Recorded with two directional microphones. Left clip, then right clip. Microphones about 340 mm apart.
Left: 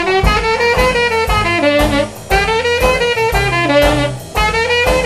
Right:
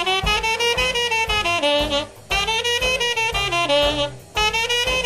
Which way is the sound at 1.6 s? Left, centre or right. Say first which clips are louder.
Left 6 dB; right.